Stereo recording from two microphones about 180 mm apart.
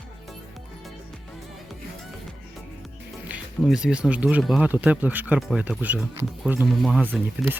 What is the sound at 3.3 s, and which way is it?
Speech, 5° right (ahead or behind).